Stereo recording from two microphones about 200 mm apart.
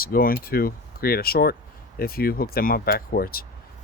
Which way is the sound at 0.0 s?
45° left (ahead or behind).